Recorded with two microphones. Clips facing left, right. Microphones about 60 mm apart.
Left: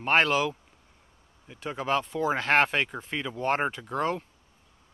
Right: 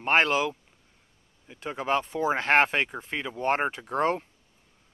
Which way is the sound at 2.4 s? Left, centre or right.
Right.